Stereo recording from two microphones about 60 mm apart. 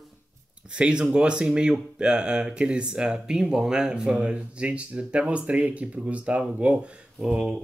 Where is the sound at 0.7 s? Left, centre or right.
Centre.